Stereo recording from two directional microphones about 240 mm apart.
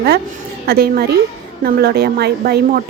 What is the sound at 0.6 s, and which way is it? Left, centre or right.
Speech, right.